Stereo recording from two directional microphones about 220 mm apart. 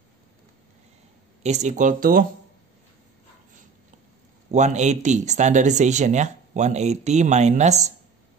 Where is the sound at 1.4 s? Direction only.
30° right (ahead or behind).